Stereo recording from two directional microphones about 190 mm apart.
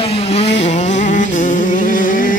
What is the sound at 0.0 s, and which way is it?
Vehicle, 30° left (ahead or behind).